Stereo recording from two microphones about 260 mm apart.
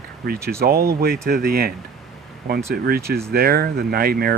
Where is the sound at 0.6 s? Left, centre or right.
Right.